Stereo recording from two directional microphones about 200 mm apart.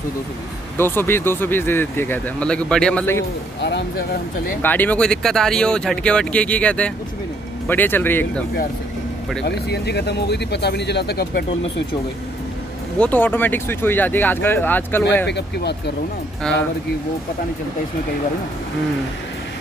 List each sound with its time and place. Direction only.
0.7 s speech: 10° left (ahead or behind)
3.6 s speech: 55° left (ahead or behind)
4.6 s speech: 10° left (ahead or behind)
9.4 s speech: 55° left (ahead or behind)
13.0 s speech: 10° left (ahead or behind)
15.2 s speech: 55° left (ahead or behind)
16.5 s speech: 5° left (ahead or behind)